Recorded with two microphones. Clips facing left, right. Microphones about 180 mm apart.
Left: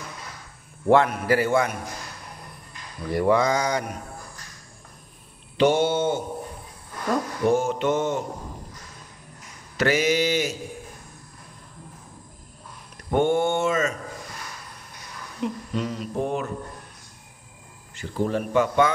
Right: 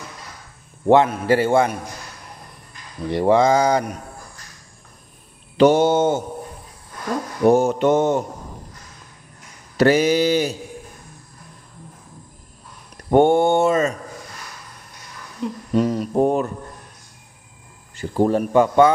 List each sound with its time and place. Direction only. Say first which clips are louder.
0.8 s a man's voice: right 4 dB; 25° right (ahead or behind)
3.1 s a man's voice: right 5 dB; 25° right (ahead or behind)
5.6 s speech: right 6 dB; 40° right (ahead or behind)
7.4 s speech: right 7 dB; 40° right (ahead or behind)
9.8 s speech: right 6 dB; 35° right (ahead or behind)
13.1 s speech: right 7 dB; 40° right (ahead or behind)
15.7 s a sound: right 9 dB; 45° right (ahead or behind)
18.1 s speech: right 6 dB; 40° right (ahead or behind)